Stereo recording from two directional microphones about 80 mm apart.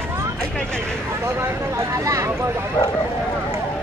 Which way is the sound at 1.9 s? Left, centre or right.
Right.